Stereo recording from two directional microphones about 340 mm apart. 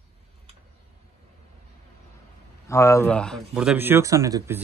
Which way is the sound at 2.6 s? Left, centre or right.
Centre.